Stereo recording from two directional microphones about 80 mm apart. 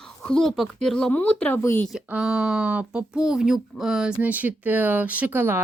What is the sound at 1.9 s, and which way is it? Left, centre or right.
Speech, centre.